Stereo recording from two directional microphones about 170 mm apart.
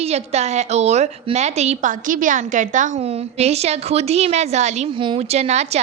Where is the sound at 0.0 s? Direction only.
40° right (ahead or behind).